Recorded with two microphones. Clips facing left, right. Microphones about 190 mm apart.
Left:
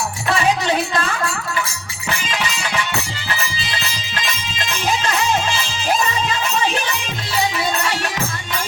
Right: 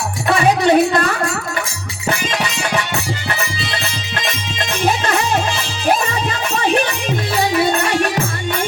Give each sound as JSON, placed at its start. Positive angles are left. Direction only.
{"t": 0.4, "sound": "a sound", "side_deg": -60}
{"t": 2.0, "sound": "music", "side_deg": -45}
{"t": 3.2, "sound": "music", "side_deg": -55}